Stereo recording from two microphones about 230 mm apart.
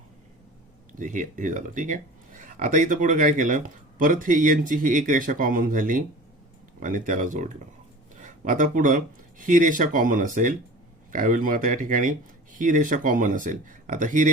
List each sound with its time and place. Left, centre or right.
0.9 s speech: right